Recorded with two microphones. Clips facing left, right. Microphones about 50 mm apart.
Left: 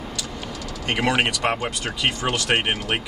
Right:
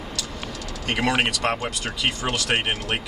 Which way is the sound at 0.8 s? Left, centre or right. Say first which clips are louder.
Left 1 dB; centre.